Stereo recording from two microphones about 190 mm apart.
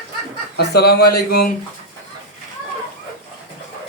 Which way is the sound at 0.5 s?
60° left (ahead or behind).